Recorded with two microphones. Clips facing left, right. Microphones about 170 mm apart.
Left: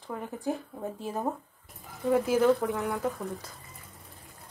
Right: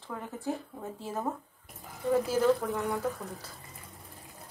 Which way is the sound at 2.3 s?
10° left (ahead or behind).